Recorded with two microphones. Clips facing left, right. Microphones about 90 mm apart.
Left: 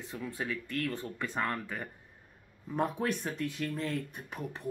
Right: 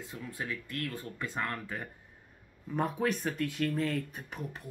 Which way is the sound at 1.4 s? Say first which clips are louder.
Left 2 dB; 15° left (ahead or behind).